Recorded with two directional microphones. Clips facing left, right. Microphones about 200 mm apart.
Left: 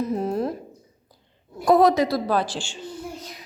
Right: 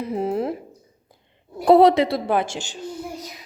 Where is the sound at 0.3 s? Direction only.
25° right (ahead or behind).